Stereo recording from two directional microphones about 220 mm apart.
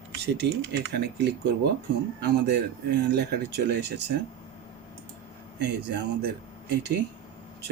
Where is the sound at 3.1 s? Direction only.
50° right (ahead or behind).